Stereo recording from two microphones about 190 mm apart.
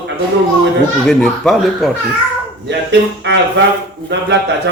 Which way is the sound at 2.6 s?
70° right (ahead or behind).